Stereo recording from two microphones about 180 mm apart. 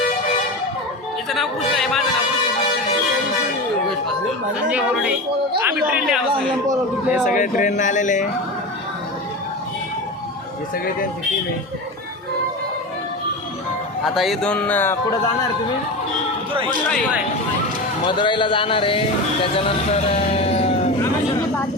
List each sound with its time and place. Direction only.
1.3 s speech: centre (ahead or behind)
5.6 s speech: 5° right (ahead or behind)
7.3 s speech: 45° left (ahead or behind)
14.2 s speech: centre (ahead or behind)
18.0 s speech: 25° left (ahead or behind)